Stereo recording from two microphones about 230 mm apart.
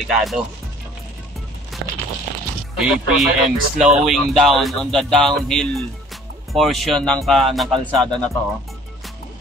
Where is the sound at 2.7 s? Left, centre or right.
Centre.